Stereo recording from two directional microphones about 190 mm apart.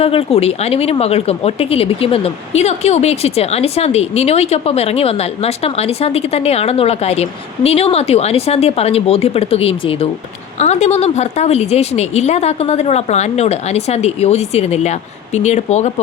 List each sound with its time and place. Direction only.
0.0 s speech: 30° left (ahead or behind)